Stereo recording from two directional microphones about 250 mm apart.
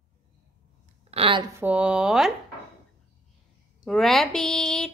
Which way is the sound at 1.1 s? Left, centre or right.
Right.